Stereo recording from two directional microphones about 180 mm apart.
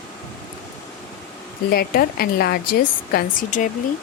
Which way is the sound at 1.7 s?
55° left (ahead or behind).